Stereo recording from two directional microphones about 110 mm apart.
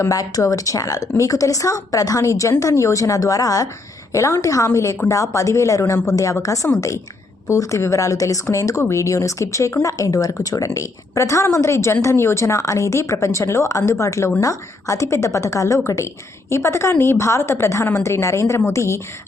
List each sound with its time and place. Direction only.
0.0 s a woman's voice: 30° left (ahead or behind)